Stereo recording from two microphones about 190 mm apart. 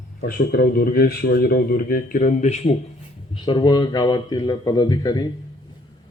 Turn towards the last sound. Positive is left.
turn(degrees=20)  # may be behind; listen again after turning